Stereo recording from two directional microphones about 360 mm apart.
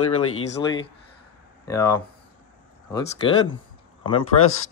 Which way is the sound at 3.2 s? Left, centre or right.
Centre.